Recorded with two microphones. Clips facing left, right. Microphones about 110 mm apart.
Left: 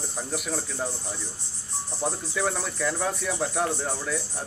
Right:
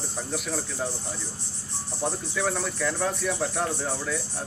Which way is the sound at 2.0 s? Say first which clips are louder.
Even; 5° left (ahead or behind).